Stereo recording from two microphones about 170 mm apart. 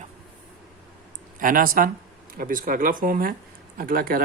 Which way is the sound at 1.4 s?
55° right (ahead or behind).